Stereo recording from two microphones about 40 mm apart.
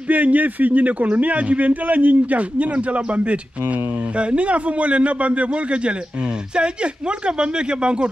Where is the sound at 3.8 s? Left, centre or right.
Right.